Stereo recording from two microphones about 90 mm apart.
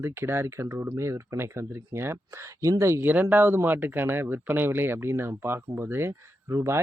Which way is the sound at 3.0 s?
20° right (ahead or behind).